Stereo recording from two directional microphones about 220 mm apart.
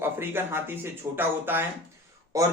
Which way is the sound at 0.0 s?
10° right (ahead or behind).